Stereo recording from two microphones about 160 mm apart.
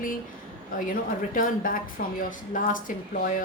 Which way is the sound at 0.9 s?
60° left (ahead or behind).